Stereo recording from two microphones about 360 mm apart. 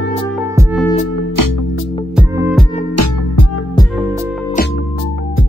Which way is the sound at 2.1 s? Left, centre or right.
Centre.